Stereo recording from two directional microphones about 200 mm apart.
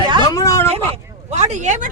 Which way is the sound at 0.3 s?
15° left (ahead or behind).